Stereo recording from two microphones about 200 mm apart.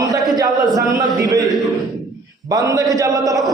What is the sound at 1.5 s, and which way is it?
Speech, centre (ahead or behind).